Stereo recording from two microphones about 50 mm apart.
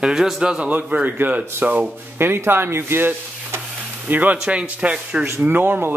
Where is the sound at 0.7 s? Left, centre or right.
Right.